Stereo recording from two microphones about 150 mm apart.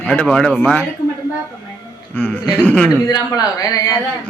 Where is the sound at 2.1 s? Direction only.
10° left (ahead or behind).